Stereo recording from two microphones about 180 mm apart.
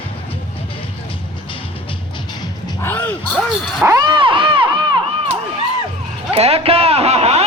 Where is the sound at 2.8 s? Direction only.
10° left (ahead or behind).